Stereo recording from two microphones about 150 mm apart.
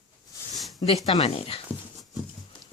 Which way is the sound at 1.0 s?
40° left (ahead or behind).